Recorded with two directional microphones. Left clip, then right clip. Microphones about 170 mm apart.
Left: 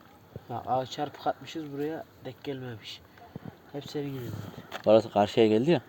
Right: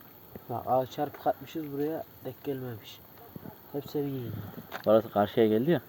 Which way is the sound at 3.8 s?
60° right (ahead or behind).